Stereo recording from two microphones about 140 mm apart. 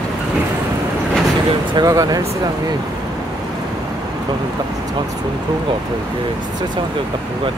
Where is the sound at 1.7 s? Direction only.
25° right (ahead or behind).